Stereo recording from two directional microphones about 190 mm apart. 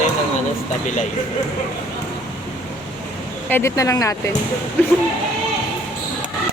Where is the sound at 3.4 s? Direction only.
10° left (ahead or behind).